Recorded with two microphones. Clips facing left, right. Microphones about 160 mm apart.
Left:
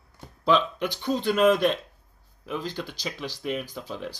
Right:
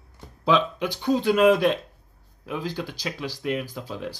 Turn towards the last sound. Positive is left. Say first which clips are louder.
# right 2 dB
turn(degrees=-5)  # may be behind; listen again after turning